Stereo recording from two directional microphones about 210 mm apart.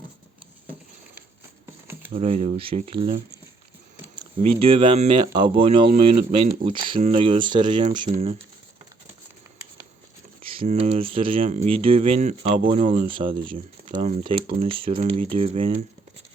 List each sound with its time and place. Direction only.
2.1 s speech: 30° right (ahead or behind)
5.9 s speech: 35° right (ahead or behind)
6.3 s speech: 25° right (ahead or behind)
10.4 s speech: 25° right (ahead or behind)